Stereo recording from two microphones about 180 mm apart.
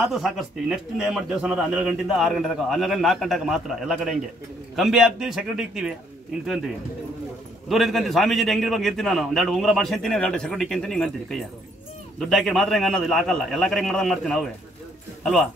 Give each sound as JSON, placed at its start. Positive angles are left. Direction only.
{"t": 0.0, "sound": "a man's voice", "side_deg": 0}